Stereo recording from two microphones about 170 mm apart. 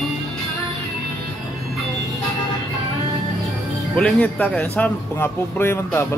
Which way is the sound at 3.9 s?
5° left (ahead or behind).